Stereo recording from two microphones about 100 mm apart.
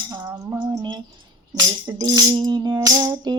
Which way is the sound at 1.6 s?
45° right (ahead or behind).